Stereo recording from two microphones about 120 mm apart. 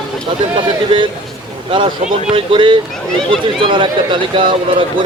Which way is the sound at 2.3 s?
45° right (ahead or behind).